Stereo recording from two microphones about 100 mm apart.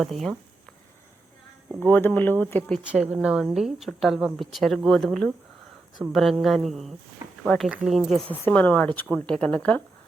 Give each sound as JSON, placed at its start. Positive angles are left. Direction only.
{"t": 0.0, "sound": "a woman's voice", "side_deg": 0}
{"t": 1.9, "sound": "speech", "side_deg": 20}
{"t": 2.8, "sound": "a woman's voice", "side_deg": -15}
{"t": 8.3, "sound": "speech", "side_deg": 15}